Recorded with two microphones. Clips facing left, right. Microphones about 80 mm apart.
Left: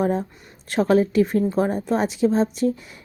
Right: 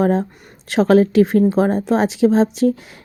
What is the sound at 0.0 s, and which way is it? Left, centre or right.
Speech, right.